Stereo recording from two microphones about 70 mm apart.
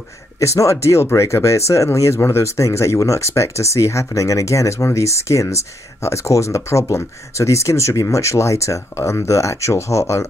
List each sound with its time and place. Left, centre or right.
0.4 s speech: left